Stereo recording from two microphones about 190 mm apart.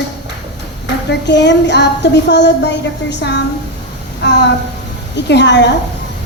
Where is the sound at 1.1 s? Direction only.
65° left (ahead or behind).